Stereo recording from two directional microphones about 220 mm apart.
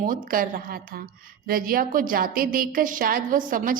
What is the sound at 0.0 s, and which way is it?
A woman's voice, 40° right (ahead or behind).